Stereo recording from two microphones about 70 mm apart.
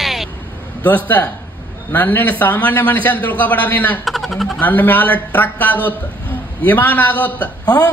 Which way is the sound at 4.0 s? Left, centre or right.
Centre.